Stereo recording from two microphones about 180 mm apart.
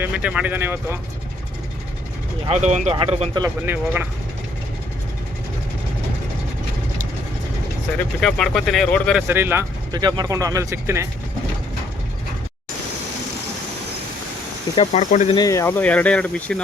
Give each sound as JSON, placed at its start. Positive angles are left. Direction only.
{"t": 0.0, "sound": "speech", "side_deg": -5}
{"t": 2.5, "sound": "speech", "side_deg": -40}
{"t": 3.4, "sound": "speech", "side_deg": -10}
{"t": 8.2, "sound": "speech", "side_deg": 5}
{"t": 9.2, "sound": "speech", "side_deg": -10}
{"t": 10.0, "sound": "speech", "side_deg": -25}
{"t": 14.8, "sound": "speech", "side_deg": 40}
{"t": 15.4, "sound": "speech", "side_deg": 20}